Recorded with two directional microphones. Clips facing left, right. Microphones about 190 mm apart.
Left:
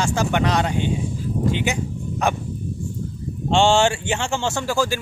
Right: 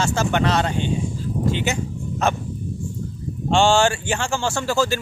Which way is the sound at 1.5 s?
15° left (ahead or behind).